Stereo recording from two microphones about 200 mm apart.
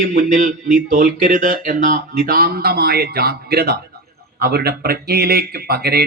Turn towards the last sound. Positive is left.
turn(degrees=-50)  # may be behind; listen again after turning